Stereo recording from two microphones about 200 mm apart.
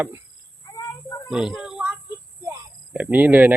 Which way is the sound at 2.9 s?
5° right (ahead or behind).